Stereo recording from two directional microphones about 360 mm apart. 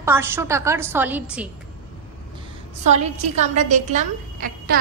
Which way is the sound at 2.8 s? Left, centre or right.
Centre.